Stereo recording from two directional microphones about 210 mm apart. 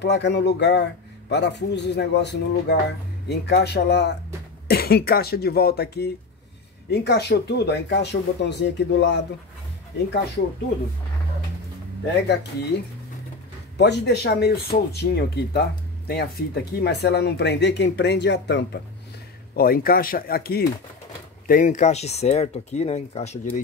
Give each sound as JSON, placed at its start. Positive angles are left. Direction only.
{"t": 0.0, "sound": "speech", "side_deg": 55}
{"t": 13.7, "sound": "speech", "side_deg": 50}